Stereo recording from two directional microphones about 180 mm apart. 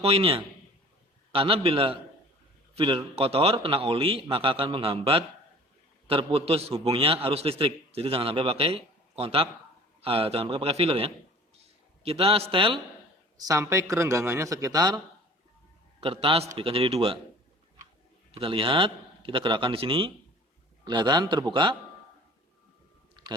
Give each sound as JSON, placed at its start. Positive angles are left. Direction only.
{"t": 0.0, "sound": "a man's voice", "side_deg": -35}
{"t": 13.4, "sound": "a man's voice", "side_deg": -15}
{"t": 18.3, "sound": "a man's voice", "side_deg": -30}
{"t": 23.2, "sound": "a sound", "side_deg": -25}